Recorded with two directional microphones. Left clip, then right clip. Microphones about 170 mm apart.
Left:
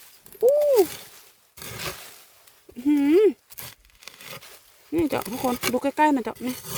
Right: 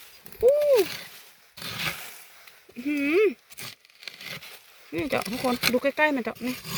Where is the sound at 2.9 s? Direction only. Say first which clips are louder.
Left 4 dB; 55° left (ahead or behind).